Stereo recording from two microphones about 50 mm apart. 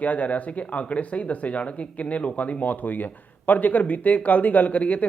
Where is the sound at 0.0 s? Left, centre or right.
Left.